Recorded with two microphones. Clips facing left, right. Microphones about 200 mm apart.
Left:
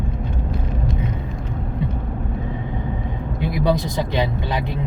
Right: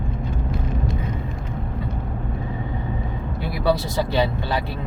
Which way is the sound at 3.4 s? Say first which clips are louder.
Left 2 dB; 20° left (ahead or behind).